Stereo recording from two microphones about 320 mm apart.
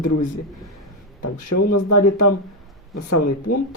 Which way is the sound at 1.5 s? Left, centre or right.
Left.